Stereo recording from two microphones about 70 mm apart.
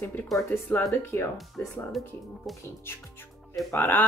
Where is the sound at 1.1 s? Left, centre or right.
Left.